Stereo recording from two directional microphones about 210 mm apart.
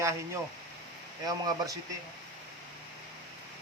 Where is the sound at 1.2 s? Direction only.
15° right (ahead or behind).